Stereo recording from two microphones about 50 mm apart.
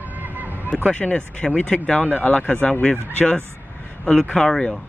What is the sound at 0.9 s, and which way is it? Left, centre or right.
Speech, left.